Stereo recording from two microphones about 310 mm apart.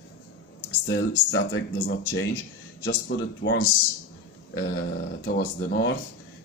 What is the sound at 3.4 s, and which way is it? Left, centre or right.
Speech, left.